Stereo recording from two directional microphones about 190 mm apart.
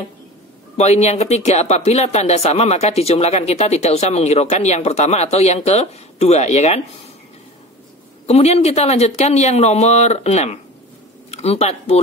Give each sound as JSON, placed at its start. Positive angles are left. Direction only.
{"t": 0.7, "sound": "speech", "side_deg": 35}
{"t": 8.3, "sound": "speech", "side_deg": 35}